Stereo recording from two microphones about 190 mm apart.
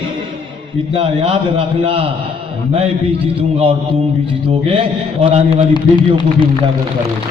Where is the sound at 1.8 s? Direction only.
25° right (ahead or behind).